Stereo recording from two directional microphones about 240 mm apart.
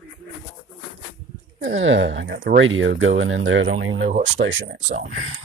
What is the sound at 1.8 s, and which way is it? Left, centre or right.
Speech, right.